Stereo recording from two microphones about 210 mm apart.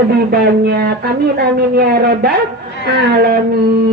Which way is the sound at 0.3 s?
50° right (ahead or behind).